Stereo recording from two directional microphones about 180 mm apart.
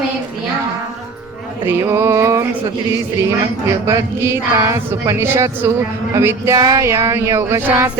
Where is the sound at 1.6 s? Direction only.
15° right (ahead or behind).